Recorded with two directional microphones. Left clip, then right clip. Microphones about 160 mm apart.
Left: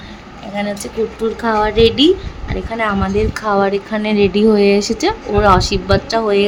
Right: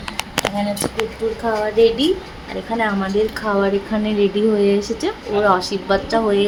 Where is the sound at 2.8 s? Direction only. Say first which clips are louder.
Left 2 dB; 15° left (ahead or behind).